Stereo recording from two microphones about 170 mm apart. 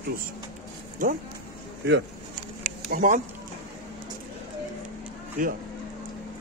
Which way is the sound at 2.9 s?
50° right (ahead or behind).